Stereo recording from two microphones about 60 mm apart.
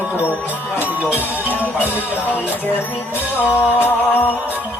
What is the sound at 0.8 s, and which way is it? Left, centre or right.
Music, right.